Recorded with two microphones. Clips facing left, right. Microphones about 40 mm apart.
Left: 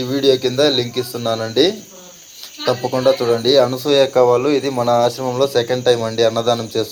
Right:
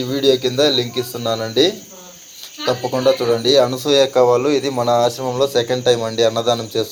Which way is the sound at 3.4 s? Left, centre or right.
Right.